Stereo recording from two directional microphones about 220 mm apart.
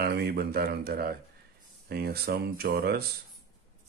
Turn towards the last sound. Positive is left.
turn(degrees=-45)  # may be behind; listen again after turning